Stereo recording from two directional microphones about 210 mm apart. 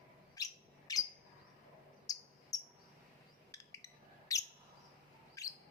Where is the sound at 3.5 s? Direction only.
15° left (ahead or behind).